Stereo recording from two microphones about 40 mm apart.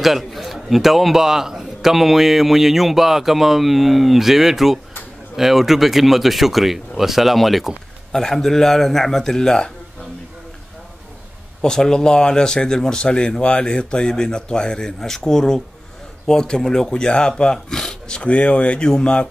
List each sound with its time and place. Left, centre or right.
0.0 s a man's voice: centre
8.2 s speech: centre
11.6 s speech: centre